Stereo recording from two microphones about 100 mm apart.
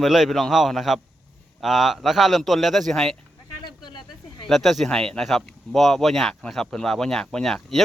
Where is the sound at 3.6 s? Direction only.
50° left (ahead or behind).